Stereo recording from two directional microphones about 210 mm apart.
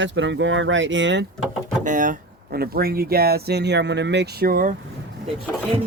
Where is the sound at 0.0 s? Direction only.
60° right (ahead or behind).